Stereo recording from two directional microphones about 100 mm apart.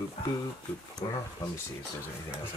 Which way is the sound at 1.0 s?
55° left (ahead or behind).